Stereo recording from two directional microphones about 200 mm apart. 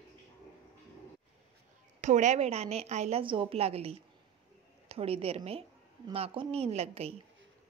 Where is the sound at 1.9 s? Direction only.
35° right (ahead or behind).